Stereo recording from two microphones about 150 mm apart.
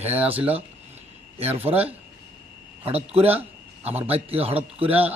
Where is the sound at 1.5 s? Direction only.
40° right (ahead or behind).